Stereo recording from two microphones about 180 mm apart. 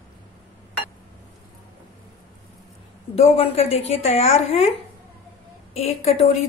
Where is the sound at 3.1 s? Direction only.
35° left (ahead or behind).